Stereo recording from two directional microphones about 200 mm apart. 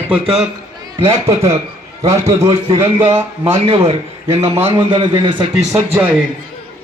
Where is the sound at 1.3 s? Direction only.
30° right (ahead or behind).